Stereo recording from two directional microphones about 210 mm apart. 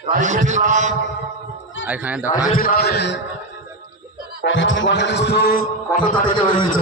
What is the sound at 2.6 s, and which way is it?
Speech, 45° left (ahead or behind).